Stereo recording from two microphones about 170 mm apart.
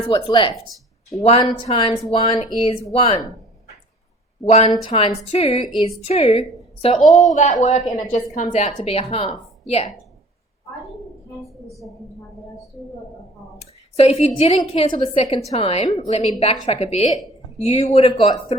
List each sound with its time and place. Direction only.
0.1 s speech: 30° left (ahead or behind)
4.7 s a woman's voice: 30° left (ahead or behind)
11.4 s a woman's voice: centre (ahead or behind)
13.6 s speech: 40° left (ahead or behind)